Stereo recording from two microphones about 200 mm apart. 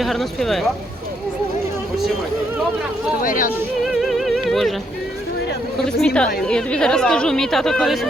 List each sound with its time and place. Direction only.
0.0 s speech: centre (ahead or behind)
3.2 s speech: 45° left (ahead or behind)
4.0 s music: centre (ahead or behind)
5.8 s speech: centre (ahead or behind)